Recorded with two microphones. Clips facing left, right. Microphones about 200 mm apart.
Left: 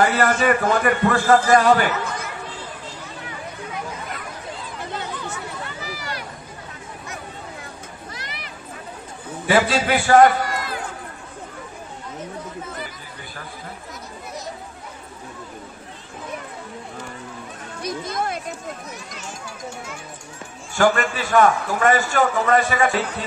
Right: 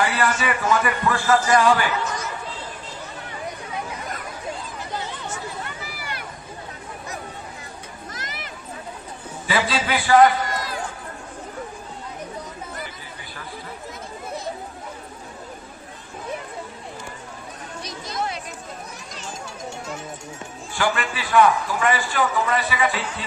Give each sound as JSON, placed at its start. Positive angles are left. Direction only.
{"t": 0.0, "sound": "a sound", "side_deg": 40}
{"t": 0.4, "sound": "a man's voice", "side_deg": 55}
{"t": 1.6, "sound": "speech", "side_deg": 40}
{"t": 2.0, "sound": "chatter", "side_deg": 55}
{"t": 8.1, "sound": "a sound", "side_deg": -45}
{"t": 9.5, "sound": "a man's voice", "side_deg": 45}
{"t": 17.8, "sound": "chatter", "side_deg": 50}
{"t": 20.7, "sound": "a man's voice", "side_deg": 45}